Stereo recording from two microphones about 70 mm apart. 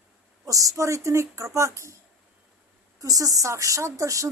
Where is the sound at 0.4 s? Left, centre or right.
Right.